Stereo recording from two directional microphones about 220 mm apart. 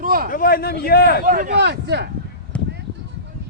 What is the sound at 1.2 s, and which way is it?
Speech, 40° right (ahead or behind).